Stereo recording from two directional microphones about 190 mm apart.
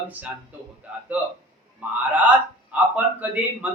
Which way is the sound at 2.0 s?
10° right (ahead or behind).